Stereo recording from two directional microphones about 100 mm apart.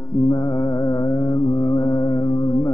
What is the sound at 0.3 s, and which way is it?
Music, 35° left (ahead or behind).